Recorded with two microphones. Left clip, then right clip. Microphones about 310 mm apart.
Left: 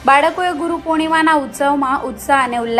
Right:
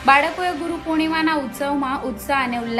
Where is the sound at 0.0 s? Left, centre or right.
Left.